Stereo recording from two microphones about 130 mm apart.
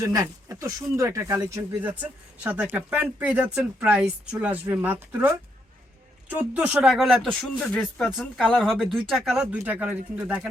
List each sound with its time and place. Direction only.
0.0 s speech: 25° right (ahead or behind)
1.8 s speech: 10° right (ahead or behind); by 8.0 s 10° left (ahead or behind)
8.0 s speech: 5° right (ahead or behind)